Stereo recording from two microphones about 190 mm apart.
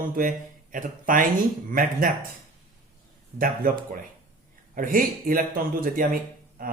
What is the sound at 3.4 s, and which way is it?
Speech, 50° right (ahead or behind).